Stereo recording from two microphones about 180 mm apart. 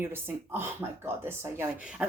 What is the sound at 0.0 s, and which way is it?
Speech, 15° right (ahead or behind).